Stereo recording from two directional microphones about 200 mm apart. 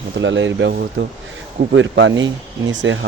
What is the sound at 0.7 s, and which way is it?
Speech, 55° right (ahead or behind).